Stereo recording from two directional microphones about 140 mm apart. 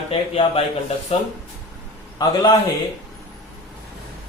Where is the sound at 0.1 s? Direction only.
40° left (ahead or behind).